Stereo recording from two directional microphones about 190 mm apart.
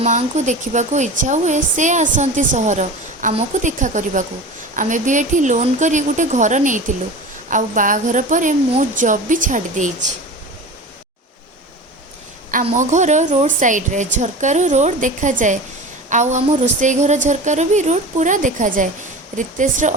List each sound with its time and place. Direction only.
0.0 s a woman's voice: 40° right (ahead or behind)
12.6 s a woman's voice: 40° right (ahead or behind)